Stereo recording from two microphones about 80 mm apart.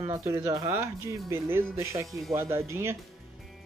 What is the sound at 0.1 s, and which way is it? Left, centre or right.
Speech, right.